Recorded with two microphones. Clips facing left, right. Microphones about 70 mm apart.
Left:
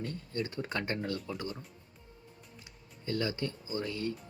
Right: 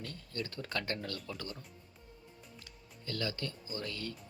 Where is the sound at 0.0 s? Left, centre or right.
Left.